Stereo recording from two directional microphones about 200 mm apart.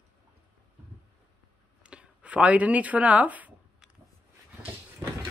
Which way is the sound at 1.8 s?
5° right (ahead or behind).